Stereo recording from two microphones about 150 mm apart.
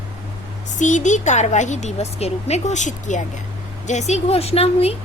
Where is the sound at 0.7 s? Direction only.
55° left (ahead or behind).